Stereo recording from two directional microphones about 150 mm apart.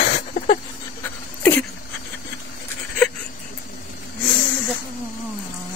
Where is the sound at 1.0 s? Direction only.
10° left (ahead or behind).